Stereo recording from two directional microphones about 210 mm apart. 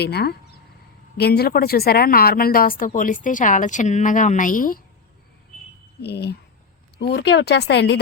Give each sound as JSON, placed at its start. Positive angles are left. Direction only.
{"t": 0.0, "sound": "a woman's voice", "side_deg": 50}
{"t": 6.0, "sound": "speech", "side_deg": 50}